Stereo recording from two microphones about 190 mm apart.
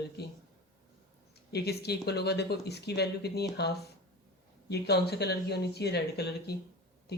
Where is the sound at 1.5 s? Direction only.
60° left (ahead or behind).